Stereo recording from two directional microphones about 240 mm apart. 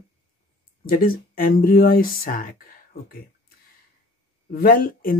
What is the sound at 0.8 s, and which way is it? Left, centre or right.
Speech, left.